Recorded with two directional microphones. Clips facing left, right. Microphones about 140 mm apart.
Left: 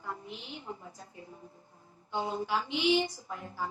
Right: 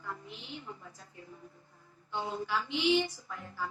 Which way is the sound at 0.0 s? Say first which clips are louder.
Left 2 dB; 25° left (ahead or behind).